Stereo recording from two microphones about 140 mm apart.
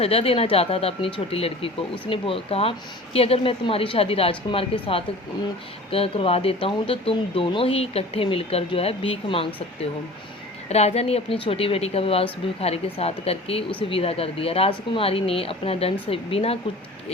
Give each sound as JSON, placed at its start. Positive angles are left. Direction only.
{"t": 0.0, "sound": "speech", "side_deg": 45}
{"t": 10.7, "sound": "speech", "side_deg": 50}